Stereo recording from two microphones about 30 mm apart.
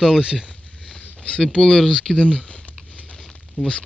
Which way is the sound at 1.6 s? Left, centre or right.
Centre.